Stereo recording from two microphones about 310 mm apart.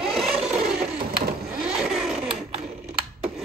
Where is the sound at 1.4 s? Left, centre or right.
Centre.